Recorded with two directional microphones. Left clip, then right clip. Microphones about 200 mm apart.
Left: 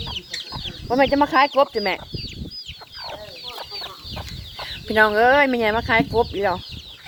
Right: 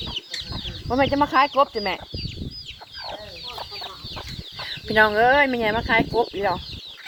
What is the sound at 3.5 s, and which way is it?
Chicken, 40° left (ahead or behind).